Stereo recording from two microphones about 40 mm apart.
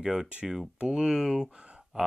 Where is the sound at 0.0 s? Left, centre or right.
Centre.